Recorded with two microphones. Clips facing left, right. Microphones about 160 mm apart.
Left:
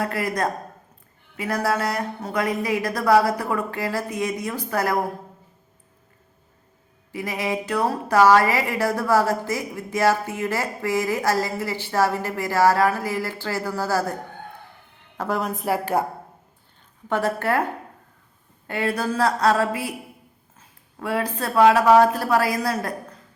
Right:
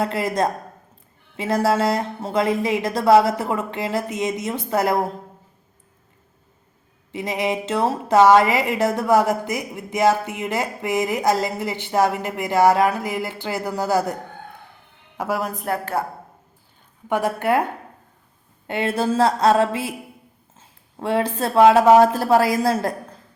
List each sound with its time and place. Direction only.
0.0 s a woman's voice: 25° right (ahead or behind)
7.1 s a woman's voice: 20° right (ahead or behind)
15.2 s a woman's voice: 5° right (ahead or behind)
17.1 s a woman's voice: 15° right (ahead or behind)
18.7 s a woman's voice: 25° right (ahead or behind)